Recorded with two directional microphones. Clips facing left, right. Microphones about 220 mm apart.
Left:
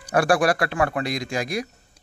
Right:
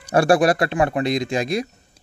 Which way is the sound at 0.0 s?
25° right (ahead or behind).